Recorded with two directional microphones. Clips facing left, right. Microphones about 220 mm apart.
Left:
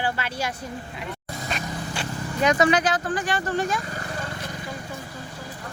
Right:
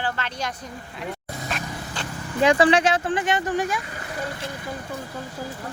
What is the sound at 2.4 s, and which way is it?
Speech, 30° right (ahead or behind).